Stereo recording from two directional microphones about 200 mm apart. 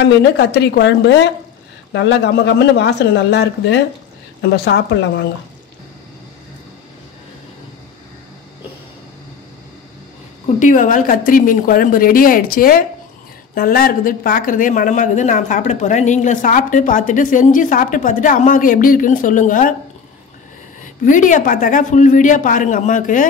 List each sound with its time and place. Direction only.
0.0 s speech: 55° left (ahead or behind)
10.6 s a woman's voice: 40° left (ahead or behind)
20.8 s speech: 40° left (ahead or behind)